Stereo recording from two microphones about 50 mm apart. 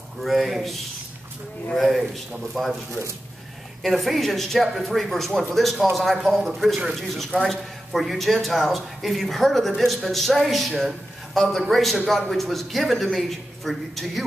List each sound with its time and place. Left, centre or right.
0.2 s a man's voice: centre
1.8 s a man's voice: centre
3.8 s a man's voice: centre